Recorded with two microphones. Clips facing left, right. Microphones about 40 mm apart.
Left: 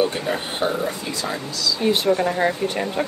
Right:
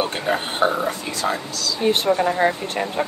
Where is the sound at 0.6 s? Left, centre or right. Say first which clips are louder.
Right 3 dB; right.